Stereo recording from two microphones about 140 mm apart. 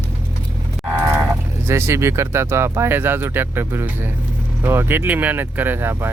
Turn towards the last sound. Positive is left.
turn(degrees=-15)  # may be behind; listen again after turning